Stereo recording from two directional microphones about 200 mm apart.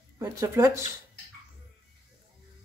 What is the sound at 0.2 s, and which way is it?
Speech, 15° right (ahead or behind).